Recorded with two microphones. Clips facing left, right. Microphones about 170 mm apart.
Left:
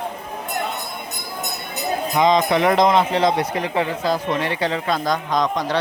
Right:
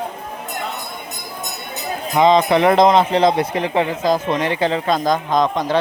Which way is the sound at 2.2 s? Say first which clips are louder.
Right 4 dB; 30° right (ahead or behind).